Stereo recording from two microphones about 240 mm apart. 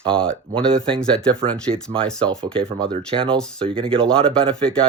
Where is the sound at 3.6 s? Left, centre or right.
Right.